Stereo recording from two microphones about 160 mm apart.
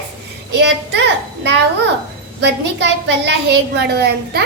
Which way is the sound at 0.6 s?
90° right.